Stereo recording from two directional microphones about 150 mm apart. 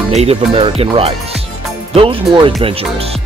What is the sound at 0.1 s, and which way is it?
Speech, 45° right (ahead or behind).